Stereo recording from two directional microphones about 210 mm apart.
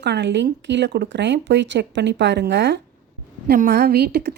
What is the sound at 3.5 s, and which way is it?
Speech, 45° right (ahead or behind).